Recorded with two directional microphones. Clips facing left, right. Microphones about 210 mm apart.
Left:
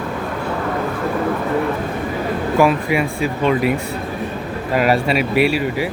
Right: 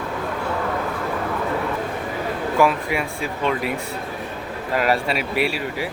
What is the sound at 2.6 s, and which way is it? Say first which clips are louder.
Speech: left 4 dB; 5° left (ahead or behind).